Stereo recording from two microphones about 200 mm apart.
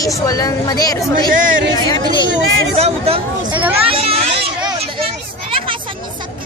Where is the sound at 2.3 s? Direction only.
75° right (ahead or behind).